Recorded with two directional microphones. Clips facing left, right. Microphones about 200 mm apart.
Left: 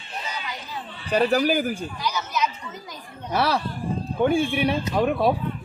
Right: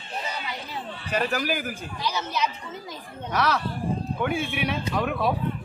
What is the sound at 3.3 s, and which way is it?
Speech, 30° left (ahead or behind).